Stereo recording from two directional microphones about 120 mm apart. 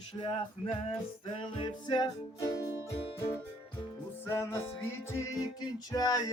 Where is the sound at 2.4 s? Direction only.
30° left (ahead or behind).